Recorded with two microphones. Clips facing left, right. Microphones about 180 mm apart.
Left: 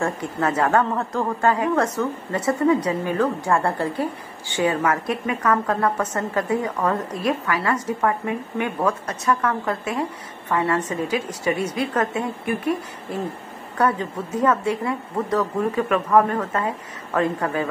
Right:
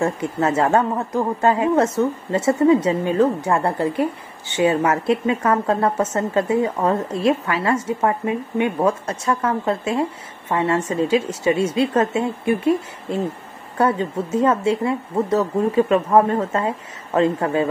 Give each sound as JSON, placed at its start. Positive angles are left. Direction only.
{"t": 0.0, "sound": "speech", "side_deg": -25}